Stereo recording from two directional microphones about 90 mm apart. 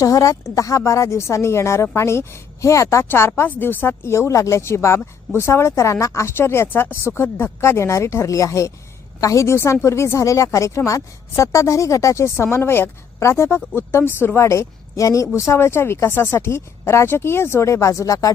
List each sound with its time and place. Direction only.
0.0 s speech: 35° left (ahead or behind)